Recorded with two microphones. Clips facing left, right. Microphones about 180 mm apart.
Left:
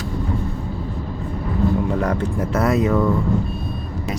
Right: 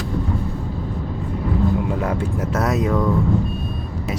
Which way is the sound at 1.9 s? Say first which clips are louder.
Left 1 dB; 5° right (ahead or behind).